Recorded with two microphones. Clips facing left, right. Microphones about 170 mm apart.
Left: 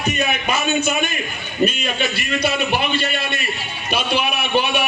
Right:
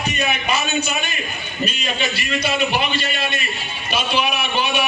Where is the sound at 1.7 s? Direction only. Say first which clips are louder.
Left 2 dB; 55° left (ahead or behind).